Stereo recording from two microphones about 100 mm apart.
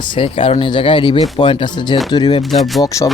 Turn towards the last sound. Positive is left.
turn(degrees=35)  # may be behind; listen again after turning